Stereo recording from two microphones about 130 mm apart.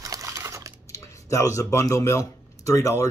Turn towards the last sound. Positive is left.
turn(degrees=25)  # may be behind; listen again after turning